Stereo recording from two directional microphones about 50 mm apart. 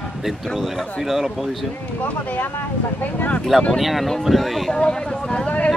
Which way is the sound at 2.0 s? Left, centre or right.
Left.